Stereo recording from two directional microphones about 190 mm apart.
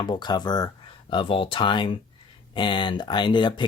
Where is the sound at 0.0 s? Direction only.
25° left (ahead or behind).